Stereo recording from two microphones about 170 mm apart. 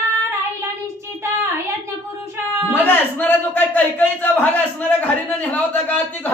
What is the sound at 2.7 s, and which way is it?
A man's voice, 10° left (ahead or behind).